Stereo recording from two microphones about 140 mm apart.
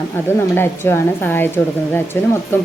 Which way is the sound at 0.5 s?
15° left (ahead or behind).